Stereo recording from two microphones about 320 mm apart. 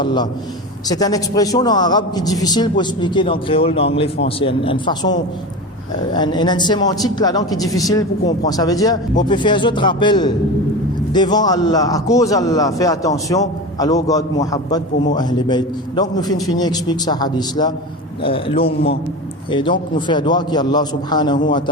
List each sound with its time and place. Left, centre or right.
0.0 s a man's voice: centre
6.1 s a man's voice: centre